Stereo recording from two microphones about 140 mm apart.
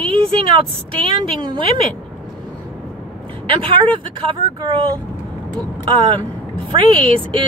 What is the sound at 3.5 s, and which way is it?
A woman's voice, 35° right (ahead or behind).